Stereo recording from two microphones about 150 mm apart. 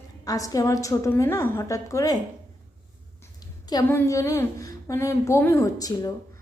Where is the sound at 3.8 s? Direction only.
20° left (ahead or behind).